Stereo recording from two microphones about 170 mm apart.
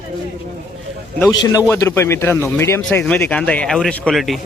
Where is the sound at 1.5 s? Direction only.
15° left (ahead or behind).